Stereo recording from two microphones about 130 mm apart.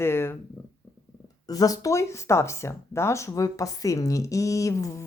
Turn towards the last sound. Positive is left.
turn(degrees=25)  # may be behind; listen again after turning